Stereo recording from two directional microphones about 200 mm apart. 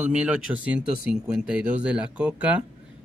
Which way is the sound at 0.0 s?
5° right (ahead or behind).